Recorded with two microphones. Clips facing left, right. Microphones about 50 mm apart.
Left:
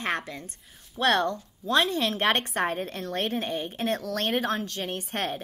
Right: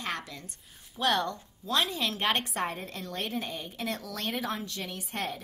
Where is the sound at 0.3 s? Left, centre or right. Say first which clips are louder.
Left 6 dB; left.